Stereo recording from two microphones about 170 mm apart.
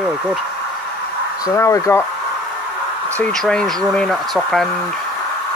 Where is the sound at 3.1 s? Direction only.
5° left (ahead or behind).